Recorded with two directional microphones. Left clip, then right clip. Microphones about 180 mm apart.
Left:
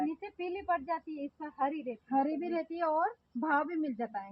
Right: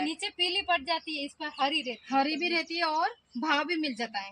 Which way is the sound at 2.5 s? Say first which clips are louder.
Right 1 dB; 20° right (ahead or behind).